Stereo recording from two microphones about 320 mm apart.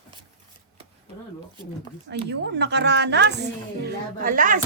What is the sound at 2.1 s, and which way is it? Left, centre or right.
A woman's voice, right.